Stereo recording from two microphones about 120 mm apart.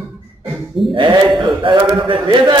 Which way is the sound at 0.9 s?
40° right (ahead or behind).